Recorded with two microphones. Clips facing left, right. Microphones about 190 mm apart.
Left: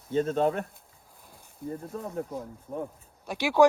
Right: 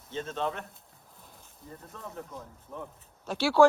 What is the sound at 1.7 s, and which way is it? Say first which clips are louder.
Speech: left 11 dB; 30° left (ahead or behind).